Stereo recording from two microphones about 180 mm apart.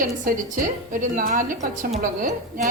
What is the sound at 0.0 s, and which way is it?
A woman's voice, 50° right (ahead or behind).